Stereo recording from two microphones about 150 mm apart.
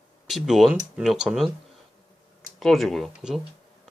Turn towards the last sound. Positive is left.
turn(degrees=-5)  # may be behind; listen again after turning